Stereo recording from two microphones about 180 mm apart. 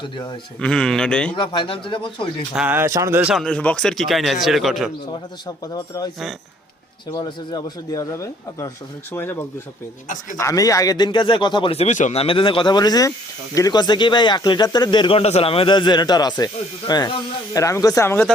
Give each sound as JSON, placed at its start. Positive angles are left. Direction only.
{"t": 0.6, "sound": "a man's voice", "side_deg": 5}
{"t": 1.4, "sound": "speech", "side_deg": 30}
{"t": 2.6, "sound": "a man's voice", "side_deg": -10}
{"t": 5.7, "sound": "speech", "side_deg": 20}
{"t": 7.1, "sound": "speech", "side_deg": 25}